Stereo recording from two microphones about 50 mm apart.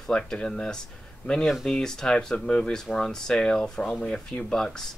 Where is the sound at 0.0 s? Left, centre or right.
Centre.